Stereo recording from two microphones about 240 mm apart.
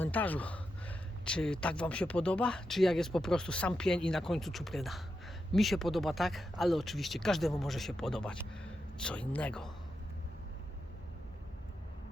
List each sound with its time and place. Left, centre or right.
0.0 s a man's voice: centre